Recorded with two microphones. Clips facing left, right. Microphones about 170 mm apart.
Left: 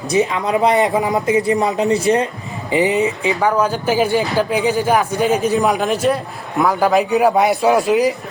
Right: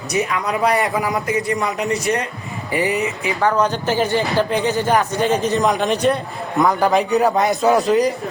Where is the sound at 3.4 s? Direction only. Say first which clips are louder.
Even; 10° left (ahead or behind).